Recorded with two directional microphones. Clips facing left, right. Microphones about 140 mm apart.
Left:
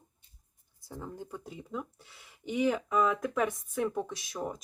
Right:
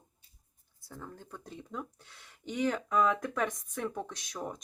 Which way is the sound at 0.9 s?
15° left (ahead or behind).